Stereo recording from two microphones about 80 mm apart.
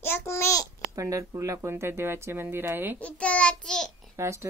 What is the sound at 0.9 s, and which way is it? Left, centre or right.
Speech, right.